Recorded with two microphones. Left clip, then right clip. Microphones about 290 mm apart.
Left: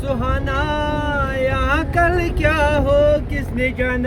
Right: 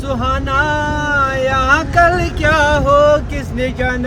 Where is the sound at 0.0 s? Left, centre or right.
Right.